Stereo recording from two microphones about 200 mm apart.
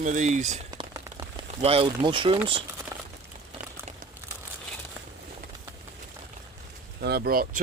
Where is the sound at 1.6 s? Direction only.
30° right (ahead or behind).